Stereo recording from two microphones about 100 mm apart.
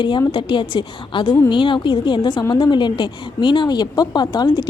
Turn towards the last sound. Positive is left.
turn(degrees=45)  # may be behind; listen again after turning